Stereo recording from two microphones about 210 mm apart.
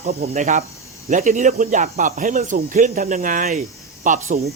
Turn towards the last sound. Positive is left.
turn(degrees=-35)  # may be behind; listen again after turning